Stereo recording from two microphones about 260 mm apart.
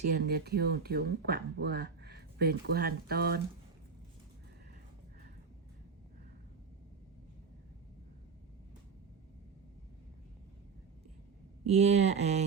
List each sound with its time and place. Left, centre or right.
0.1 s speech: right
11.7 s speech: right